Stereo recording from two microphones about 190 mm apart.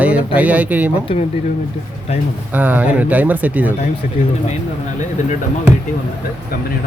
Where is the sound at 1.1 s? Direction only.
30° left (ahead or behind).